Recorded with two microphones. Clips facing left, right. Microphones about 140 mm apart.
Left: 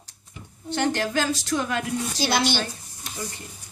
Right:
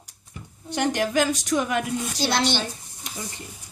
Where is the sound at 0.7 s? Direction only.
15° right (ahead or behind).